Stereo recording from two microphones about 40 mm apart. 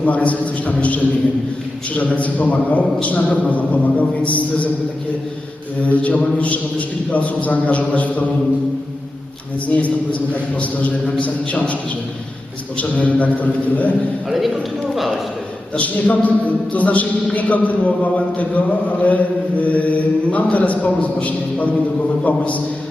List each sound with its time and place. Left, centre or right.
0.0 s a man's voice: left
5.8 s a man's voice: left
9.6 s a man's voice: left
11.2 s a man's voice: left
14.3 s speech: centre
15.8 s a man's voice: left